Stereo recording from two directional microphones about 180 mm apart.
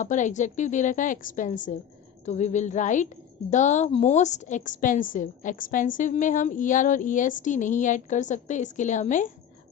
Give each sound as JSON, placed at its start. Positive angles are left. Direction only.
{"t": 0.0, "sound": "a woman's voice", "side_deg": 45}